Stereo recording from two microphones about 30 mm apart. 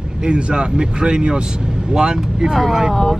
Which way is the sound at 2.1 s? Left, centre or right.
Centre.